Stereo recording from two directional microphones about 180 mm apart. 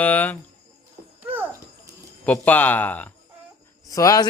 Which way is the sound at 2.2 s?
10° left (ahead or behind).